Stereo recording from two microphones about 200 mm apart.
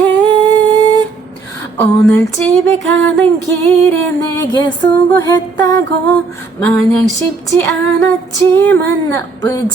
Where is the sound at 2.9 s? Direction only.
10° left (ahead or behind).